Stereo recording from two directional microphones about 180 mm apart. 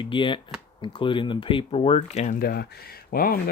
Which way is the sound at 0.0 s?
25° left (ahead or behind).